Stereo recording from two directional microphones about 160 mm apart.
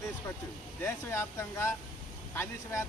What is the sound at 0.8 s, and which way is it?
Speech, 15° left (ahead or behind).